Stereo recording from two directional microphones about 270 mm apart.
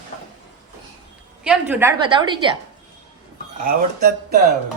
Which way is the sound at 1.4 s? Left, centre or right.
Centre.